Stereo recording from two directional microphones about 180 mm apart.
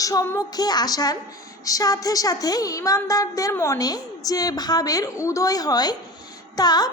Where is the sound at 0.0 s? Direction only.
20° left (ahead or behind).